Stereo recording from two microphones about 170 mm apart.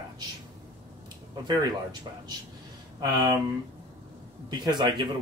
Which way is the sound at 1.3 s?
25° right (ahead or behind).